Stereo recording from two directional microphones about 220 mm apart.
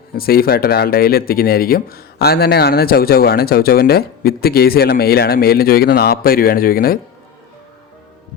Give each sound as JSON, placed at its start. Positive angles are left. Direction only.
{"t": 0.2, "sound": "speech", "side_deg": 45}